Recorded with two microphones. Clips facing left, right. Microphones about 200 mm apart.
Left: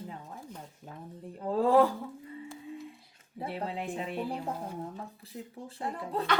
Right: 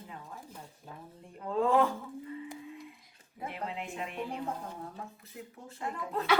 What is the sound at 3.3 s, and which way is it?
Speech, 35° left (ahead or behind).